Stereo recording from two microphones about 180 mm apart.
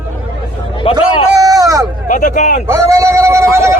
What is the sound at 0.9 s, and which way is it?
Speech, 20° right (ahead or behind).